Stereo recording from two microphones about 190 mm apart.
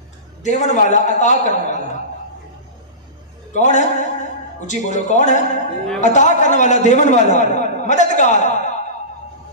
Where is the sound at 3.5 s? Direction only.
40° left (ahead or behind).